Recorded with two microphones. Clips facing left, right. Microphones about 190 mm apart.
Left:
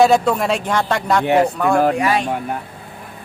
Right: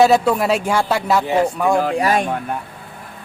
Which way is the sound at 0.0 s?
5° right (ahead or behind).